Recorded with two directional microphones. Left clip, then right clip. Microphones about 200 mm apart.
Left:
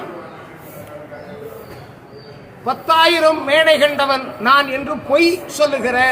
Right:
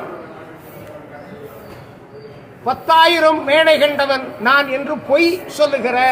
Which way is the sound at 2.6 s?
Centre (ahead or behind).